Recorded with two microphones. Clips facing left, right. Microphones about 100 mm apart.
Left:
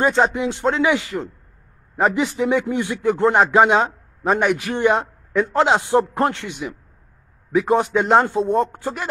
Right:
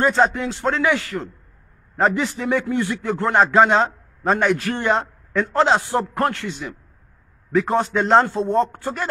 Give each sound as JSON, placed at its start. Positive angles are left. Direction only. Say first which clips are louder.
{"t": 0.0, "sound": "speech", "louder": "even", "side_deg": 15}